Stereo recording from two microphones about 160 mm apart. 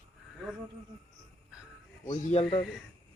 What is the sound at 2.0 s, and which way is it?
Speech, 35° left (ahead or behind).